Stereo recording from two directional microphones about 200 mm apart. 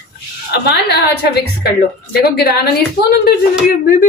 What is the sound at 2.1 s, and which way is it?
Speech, 50° left (ahead or behind).